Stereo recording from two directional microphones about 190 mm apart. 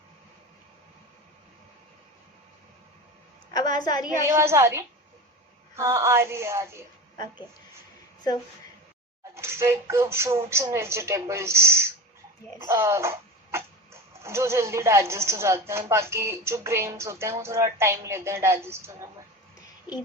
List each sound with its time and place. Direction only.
3.5 s a woman's voice: 20° left (ahead or behind)
4.3 s music: 15° right (ahead or behind)
9.3 s speech: 15° right (ahead or behind)
10.5 s music: 15° right (ahead or behind)
12.6 s speech: 15° right (ahead or behind)
14.2 s music: 15° right (ahead or behind)